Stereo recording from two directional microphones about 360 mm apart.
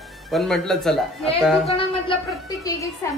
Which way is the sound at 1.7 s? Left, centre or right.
Centre.